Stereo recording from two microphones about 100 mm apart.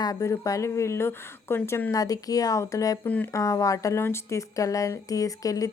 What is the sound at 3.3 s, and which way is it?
Speech, 35° left (ahead or behind).